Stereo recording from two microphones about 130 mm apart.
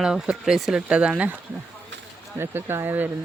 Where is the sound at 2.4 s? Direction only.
20° right (ahead or behind).